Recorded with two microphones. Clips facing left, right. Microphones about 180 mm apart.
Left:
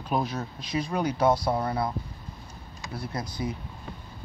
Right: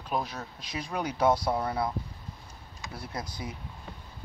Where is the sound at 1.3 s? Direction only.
10° left (ahead or behind).